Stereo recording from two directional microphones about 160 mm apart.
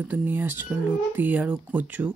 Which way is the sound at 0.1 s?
10° right (ahead or behind).